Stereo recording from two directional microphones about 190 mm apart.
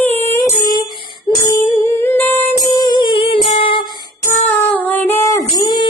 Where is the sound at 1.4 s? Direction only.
10° left (ahead or behind).